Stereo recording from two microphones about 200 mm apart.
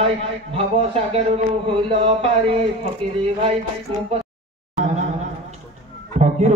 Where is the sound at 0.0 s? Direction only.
30° right (ahead or behind).